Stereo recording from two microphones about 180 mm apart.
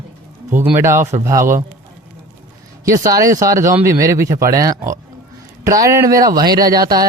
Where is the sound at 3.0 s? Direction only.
20° right (ahead or behind).